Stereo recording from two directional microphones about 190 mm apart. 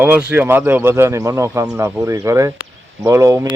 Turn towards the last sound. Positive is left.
turn(degrees=-15)  # may be behind; listen again after turning